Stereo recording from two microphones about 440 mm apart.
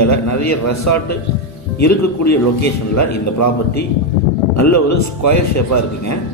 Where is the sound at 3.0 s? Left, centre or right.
Left.